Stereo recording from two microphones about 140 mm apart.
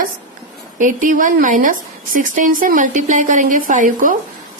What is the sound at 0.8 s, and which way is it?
A woman's voice, 65° right (ahead or behind).